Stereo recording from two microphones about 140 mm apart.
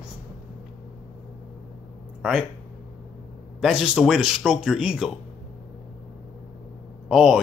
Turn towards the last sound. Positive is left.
turn(degrees=-5)  # may be behind; listen again after turning